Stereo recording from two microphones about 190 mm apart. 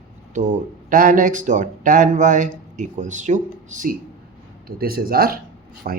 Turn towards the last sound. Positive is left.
turn(degrees=-50)  # may be behind; listen again after turning